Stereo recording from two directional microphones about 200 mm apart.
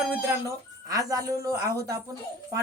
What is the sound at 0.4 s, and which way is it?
A man's voice, 15° right (ahead or behind).